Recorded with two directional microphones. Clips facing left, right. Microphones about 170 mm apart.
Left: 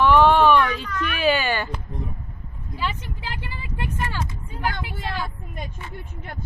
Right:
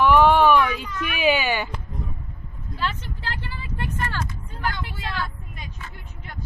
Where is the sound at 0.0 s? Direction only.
10° right (ahead or behind).